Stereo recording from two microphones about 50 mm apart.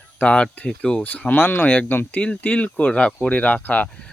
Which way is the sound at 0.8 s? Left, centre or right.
Centre.